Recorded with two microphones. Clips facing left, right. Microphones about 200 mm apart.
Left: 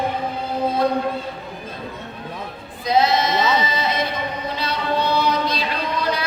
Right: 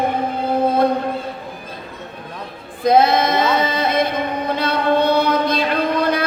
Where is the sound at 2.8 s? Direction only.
55° right (ahead or behind).